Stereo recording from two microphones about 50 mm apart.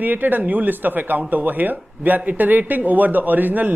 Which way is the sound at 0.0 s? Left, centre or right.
Right.